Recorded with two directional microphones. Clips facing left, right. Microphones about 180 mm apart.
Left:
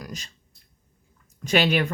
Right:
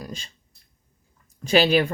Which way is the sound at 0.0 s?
30° right (ahead or behind).